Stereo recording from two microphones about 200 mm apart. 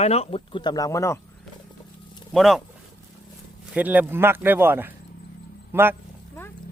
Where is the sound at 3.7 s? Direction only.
10° right (ahead or behind).